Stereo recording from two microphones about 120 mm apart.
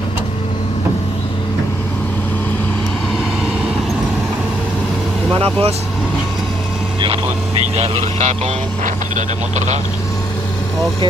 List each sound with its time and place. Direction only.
5.4 s speech: 50° right (ahead or behind)
7.7 s speech: 60° right (ahead or behind)